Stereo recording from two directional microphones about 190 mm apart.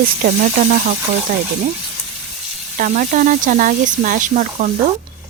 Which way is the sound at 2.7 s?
45° right (ahead or behind).